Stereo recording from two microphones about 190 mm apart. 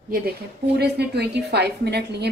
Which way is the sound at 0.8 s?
60° right (ahead or behind).